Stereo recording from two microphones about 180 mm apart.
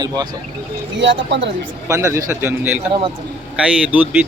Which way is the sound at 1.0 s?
80° right.